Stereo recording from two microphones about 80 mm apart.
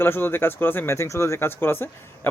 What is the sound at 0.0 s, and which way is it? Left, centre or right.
Speech, left.